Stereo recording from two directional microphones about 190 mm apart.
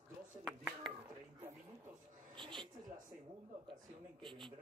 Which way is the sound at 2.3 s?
25° right (ahead or behind).